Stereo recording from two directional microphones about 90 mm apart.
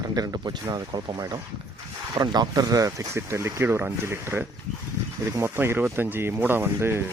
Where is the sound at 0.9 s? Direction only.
65° right (ahead or behind).